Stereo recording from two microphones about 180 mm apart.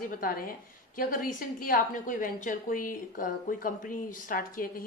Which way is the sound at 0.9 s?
50° left (ahead or behind).